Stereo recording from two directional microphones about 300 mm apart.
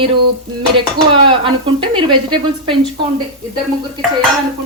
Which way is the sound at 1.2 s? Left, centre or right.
Centre.